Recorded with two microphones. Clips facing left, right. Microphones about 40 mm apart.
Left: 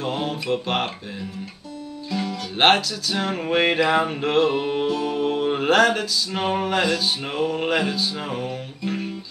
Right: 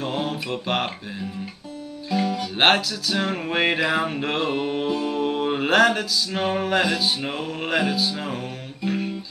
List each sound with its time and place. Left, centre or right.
0.0 s music: centre
2.0 s music: centre
2.4 s music: centre